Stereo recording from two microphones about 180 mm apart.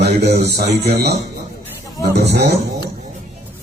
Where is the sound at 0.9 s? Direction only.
65° right (ahead or behind).